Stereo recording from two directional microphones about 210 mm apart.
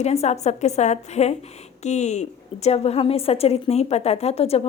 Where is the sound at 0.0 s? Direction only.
30° left (ahead or behind).